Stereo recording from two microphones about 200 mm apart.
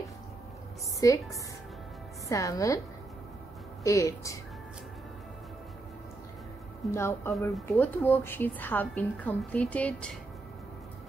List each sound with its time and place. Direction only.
1.0 s a woman's voice: 15° left (ahead or behind)
2.2 s a woman's voice: 15° left (ahead or behind)
3.8 s a woman's voice: 15° left (ahead or behind)
6.9 s a woman's voice: 10° left (ahead or behind)